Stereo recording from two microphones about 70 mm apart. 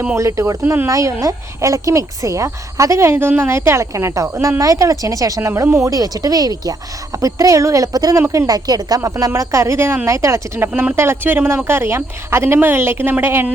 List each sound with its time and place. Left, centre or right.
0.2 s speech: right
0.6 s a woman's voice: right
0.9 s speech: right
4.6 s speech: right
9.0 s a woman's voice: right